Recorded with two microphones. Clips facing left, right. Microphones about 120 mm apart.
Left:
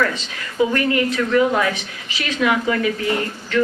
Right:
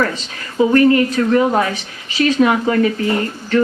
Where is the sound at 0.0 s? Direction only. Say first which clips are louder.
Right 2 dB; 35° right (ahead or behind).